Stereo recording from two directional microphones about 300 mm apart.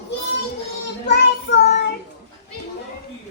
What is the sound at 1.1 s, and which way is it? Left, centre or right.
Child singing, left.